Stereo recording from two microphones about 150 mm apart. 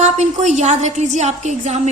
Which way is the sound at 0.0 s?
50° right (ahead or behind).